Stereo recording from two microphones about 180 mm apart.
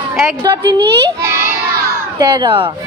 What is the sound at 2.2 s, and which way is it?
Speech, 25° right (ahead or behind).